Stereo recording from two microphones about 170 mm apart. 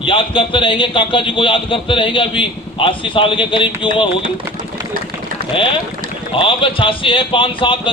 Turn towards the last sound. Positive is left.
turn(degrees=30)  # may be behind; listen again after turning